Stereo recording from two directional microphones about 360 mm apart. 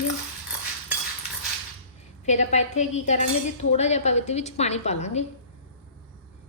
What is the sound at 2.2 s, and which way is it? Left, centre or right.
A woman's voice, centre.